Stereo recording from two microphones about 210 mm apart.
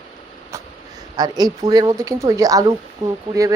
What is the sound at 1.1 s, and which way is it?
Speech, 20° right (ahead or behind).